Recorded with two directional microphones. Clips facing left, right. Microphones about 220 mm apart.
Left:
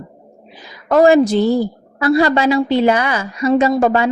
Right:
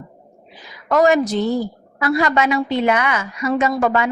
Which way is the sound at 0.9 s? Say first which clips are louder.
Left 5 dB; 30° left (ahead or behind).